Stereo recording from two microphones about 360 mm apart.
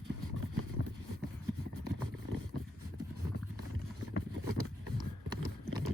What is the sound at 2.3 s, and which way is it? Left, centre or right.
Vehicle, right.